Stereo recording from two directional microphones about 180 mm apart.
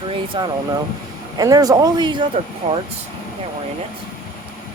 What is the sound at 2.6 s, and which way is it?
Speech, 35° right (ahead or behind).